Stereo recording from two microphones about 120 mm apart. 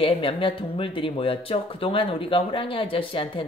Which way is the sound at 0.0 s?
50° left (ahead or behind).